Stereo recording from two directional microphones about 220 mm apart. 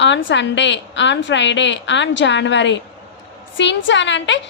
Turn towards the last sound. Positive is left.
turn(degrees=55)  # may be behind; listen again after turning